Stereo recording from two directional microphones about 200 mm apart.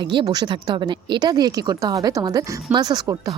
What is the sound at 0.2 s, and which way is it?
Speech, 20° right (ahead or behind).